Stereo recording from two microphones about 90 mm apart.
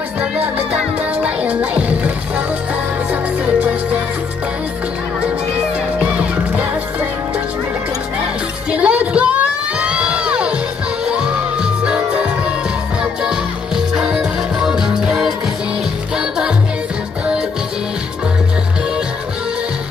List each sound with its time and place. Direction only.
1.2 s music: 15° right (ahead or behind)
5.9 s music: 15° right (ahead or behind)
8.7 s music: 15° right (ahead or behind)